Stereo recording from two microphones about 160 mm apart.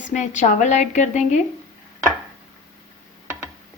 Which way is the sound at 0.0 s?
50° left (ahead or behind).